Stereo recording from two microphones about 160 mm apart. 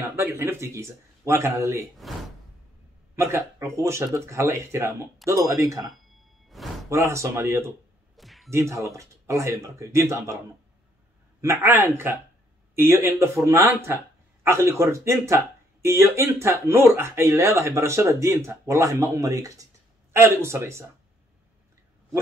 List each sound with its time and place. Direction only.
0.1 s speech: 15° right (ahead or behind)
3.2 s speech: 15° right (ahead or behind)
5.9 s a sound: centre (ahead or behind)
6.9 s speech: 20° right (ahead or behind)
8.2 s music: centre (ahead or behind)
8.5 s speech: 15° right (ahead or behind)
11.4 s speech: 15° right (ahead or behind)